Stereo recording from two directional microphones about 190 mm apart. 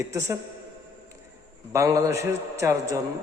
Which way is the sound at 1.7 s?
15° right (ahead or behind).